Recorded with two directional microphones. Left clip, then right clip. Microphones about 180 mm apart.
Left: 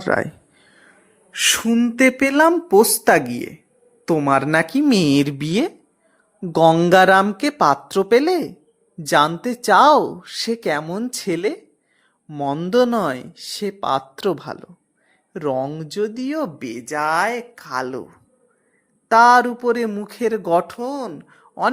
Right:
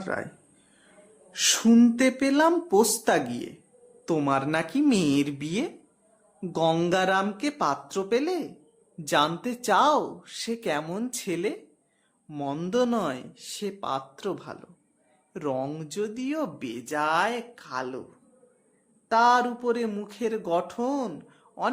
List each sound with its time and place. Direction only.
0.0 s speech: 50° left (ahead or behind)
1.3 s speech: 35° left (ahead or behind)
1.6 s speech: 25° left (ahead or behind)
2.0 s speech: 35° left (ahead or behind)
15.3 s speech: 25° left (ahead or behind)